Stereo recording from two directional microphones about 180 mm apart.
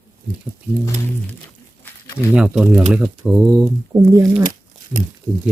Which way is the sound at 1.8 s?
15° left (ahead or behind).